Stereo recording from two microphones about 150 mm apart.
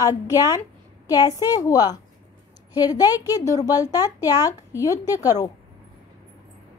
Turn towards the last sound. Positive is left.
turn(degrees=20)  # may be behind; listen again after turning